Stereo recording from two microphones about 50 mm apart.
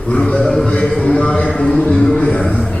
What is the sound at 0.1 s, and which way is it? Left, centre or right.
Speech, left.